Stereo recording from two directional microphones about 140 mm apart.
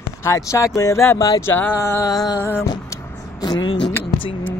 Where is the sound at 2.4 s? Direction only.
15° left (ahead or behind).